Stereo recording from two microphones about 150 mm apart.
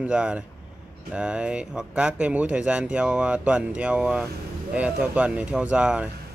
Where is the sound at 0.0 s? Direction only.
5° right (ahead or behind).